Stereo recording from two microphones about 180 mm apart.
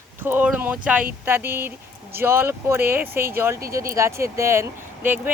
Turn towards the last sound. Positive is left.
turn(degrees=-15)  # may be behind; listen again after turning